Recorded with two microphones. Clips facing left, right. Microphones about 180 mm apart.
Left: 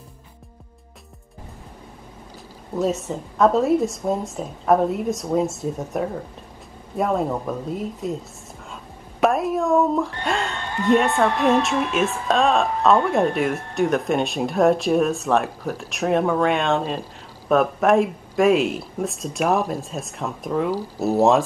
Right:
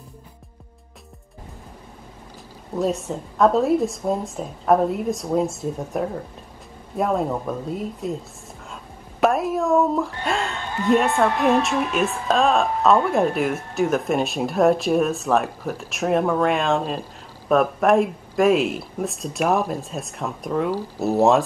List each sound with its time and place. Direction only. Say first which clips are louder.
2.7 s a woman's voice: even; centre (ahead or behind)
9.2 s a woman's voice: even; centre (ahead or behind)